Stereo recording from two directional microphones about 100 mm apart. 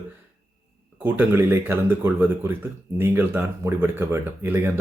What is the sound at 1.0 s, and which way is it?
Speech, 20° right (ahead or behind).